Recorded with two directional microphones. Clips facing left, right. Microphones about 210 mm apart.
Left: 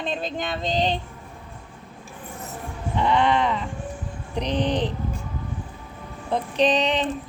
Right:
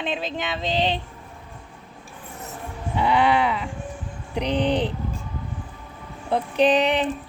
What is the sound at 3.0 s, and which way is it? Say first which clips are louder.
Speech: right 1 dB; 10° right (ahead or behind).